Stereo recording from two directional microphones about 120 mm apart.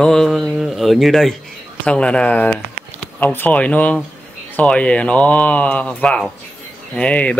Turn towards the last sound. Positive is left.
turn(degrees=10)  # may be behind; listen again after turning